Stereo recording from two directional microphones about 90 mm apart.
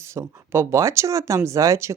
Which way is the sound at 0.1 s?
30° right (ahead or behind).